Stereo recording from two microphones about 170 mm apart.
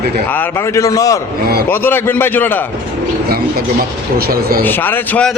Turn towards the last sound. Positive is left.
turn(degrees=10)  # may be behind; listen again after turning